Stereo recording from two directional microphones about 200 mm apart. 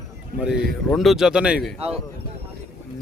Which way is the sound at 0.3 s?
5° right (ahead or behind).